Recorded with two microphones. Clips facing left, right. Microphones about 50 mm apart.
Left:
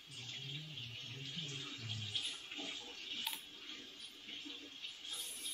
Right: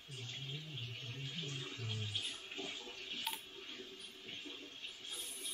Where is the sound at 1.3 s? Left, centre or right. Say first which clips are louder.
Right 1 dB; centre.